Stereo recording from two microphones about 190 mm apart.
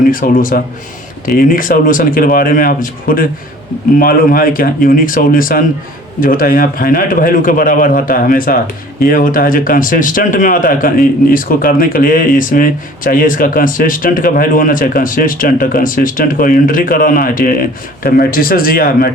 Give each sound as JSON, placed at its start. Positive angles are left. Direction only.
{"t": 0.1, "sound": "speech", "side_deg": 45}